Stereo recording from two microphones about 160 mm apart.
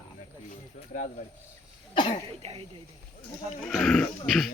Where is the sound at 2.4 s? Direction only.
40° right (ahead or behind).